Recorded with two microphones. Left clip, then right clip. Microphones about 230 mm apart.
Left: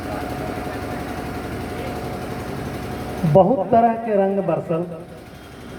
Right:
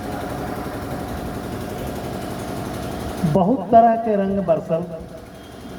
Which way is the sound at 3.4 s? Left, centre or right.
Left.